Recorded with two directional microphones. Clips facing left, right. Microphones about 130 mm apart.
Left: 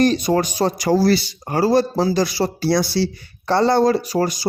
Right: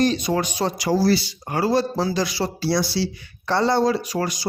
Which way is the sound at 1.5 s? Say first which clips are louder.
Left 4 dB; 40° left (ahead or behind).